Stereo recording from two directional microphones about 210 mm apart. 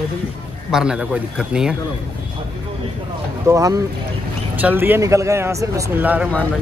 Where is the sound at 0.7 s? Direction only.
5° right (ahead or behind).